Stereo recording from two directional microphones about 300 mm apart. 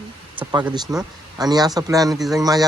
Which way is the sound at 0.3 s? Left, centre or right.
Centre.